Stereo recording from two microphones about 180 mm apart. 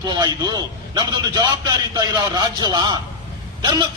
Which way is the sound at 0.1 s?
20° right (ahead or behind).